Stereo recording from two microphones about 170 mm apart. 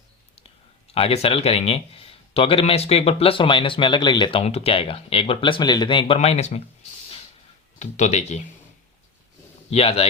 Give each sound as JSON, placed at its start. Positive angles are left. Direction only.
{"t": 0.9, "sound": "speech", "side_deg": 35}
{"t": 6.1, "sound": "speech", "side_deg": 40}
{"t": 7.8, "sound": "speech", "side_deg": 45}
{"t": 9.6, "sound": "speech", "side_deg": 35}